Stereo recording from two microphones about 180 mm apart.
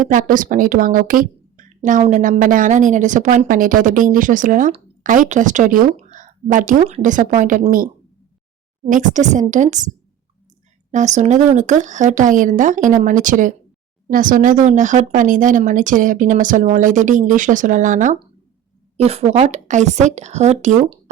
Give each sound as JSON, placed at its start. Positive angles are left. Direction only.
{"t": 0.1, "sound": "a woman's voice", "side_deg": -50}
{"t": 8.9, "sound": "a woman's voice", "side_deg": -45}
{"t": 10.9, "sound": "a woman's voice", "side_deg": -40}